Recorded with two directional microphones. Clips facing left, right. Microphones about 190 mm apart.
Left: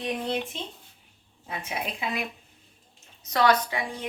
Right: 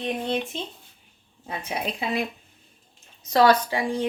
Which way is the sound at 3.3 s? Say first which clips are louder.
Right 4 dB; 30° right (ahead or behind).